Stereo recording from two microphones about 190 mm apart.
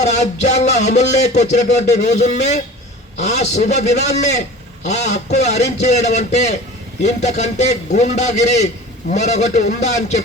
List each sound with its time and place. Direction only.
0.0 s a man's voice: 35° left (ahead or behind)